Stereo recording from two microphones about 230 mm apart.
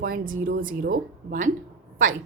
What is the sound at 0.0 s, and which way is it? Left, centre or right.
A woman's voice, right.